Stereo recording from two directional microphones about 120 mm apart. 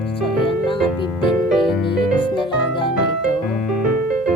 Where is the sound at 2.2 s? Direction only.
45° left (ahead or behind).